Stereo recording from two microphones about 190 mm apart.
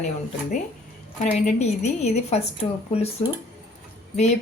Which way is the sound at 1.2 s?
40° left (ahead or behind).